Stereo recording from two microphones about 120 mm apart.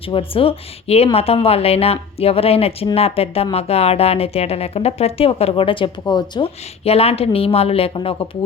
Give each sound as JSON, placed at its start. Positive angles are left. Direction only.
{"t": 0.1, "sound": "speech", "side_deg": 50}
{"t": 6.8, "sound": "speech", "side_deg": 55}